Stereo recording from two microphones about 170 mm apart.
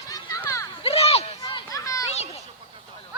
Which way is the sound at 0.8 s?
35° left (ahead or behind).